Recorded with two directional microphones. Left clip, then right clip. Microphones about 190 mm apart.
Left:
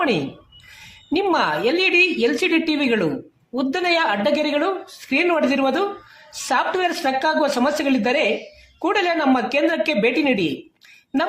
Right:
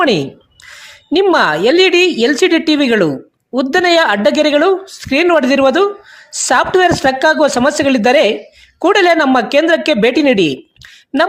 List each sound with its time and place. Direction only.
1.1 s speech: 40° right (ahead or behind)